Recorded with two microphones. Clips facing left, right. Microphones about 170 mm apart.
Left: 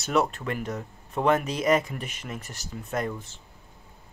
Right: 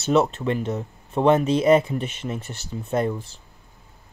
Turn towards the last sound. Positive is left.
turn(degrees=-35)  # may be behind; listen again after turning